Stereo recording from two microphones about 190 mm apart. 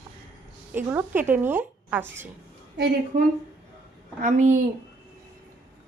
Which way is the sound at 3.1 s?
45° right (ahead or behind).